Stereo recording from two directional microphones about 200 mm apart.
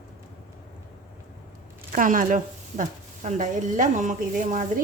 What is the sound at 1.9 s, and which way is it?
Speech, 40° right (ahead or behind).